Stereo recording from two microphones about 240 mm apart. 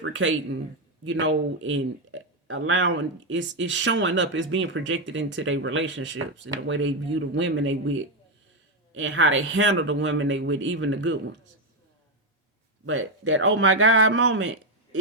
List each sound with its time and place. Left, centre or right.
0.0 s speech: right
12.8 s speech: right